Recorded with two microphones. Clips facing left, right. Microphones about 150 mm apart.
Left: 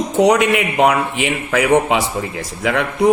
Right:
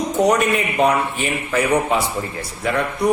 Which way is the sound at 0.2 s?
90° left.